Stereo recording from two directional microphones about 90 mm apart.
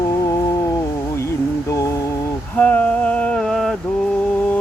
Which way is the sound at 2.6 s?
15° left (ahead or behind).